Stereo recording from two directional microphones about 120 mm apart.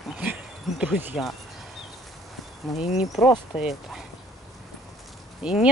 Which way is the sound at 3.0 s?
Centre (ahead or behind).